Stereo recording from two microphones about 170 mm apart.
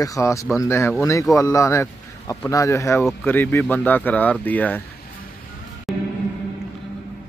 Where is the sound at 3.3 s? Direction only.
10° left (ahead or behind).